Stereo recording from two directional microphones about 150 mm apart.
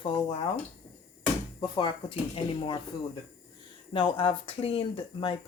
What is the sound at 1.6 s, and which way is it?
Speech, 30° left (ahead or behind).